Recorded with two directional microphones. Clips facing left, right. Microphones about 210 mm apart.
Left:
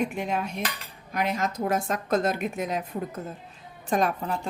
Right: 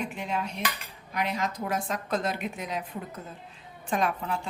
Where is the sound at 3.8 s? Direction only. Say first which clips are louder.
Left 3 dB; 40° left (ahead or behind).